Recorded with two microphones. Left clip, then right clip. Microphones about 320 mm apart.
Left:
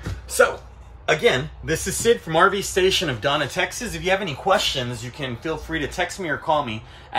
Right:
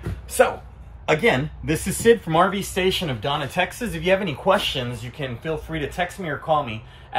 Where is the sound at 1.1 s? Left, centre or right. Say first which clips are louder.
Even; left.